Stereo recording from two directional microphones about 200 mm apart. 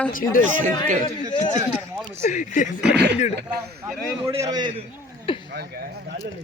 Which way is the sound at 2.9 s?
55° right (ahead or behind).